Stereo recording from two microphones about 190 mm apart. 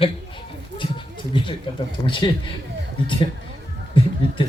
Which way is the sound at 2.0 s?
25° left (ahead or behind).